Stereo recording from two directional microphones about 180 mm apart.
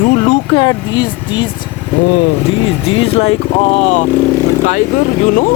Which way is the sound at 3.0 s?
35° left (ahead or behind).